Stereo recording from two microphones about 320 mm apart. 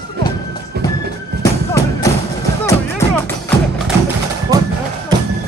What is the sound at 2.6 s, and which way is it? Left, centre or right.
Music, centre.